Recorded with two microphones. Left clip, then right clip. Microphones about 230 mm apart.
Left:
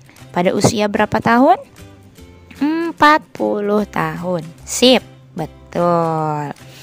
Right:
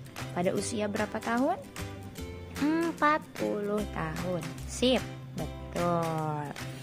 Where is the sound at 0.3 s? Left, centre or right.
Left.